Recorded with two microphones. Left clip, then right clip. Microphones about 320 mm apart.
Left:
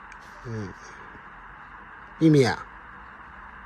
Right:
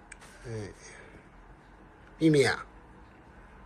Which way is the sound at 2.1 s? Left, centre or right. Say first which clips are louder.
Left 4 dB; centre.